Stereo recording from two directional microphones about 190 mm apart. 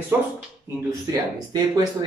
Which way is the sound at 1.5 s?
20° right (ahead or behind).